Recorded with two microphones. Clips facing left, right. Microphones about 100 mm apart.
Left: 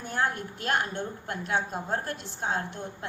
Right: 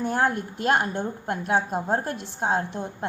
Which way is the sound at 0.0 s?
40° right (ahead or behind).